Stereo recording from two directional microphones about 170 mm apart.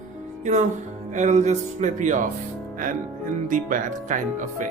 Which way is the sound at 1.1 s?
45° right (ahead or behind).